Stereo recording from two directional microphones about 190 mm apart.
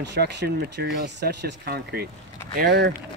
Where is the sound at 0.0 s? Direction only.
65° right (ahead or behind).